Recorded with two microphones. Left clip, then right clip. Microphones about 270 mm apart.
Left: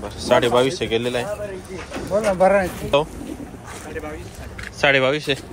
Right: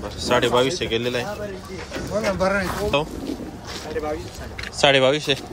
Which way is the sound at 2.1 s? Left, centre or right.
Left.